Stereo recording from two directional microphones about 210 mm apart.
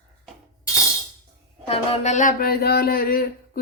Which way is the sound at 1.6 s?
30° left (ahead or behind).